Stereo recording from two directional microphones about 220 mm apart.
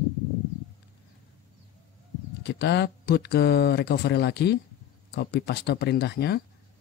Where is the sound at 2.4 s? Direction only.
50° left (ahead or behind).